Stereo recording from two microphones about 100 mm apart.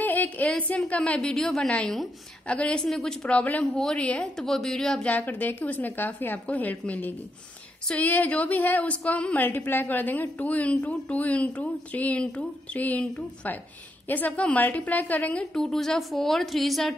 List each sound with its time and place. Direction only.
0.0 s a sound: 15° left (ahead or behind)
1.3 s a woman's voice: 5° left (ahead or behind)
5.1 s a woman's voice: 15° left (ahead or behind); by 16.9 s centre (ahead or behind)